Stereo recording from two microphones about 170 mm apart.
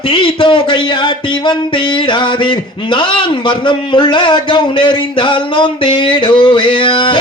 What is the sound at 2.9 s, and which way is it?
Speech, 25° left (ahead or behind).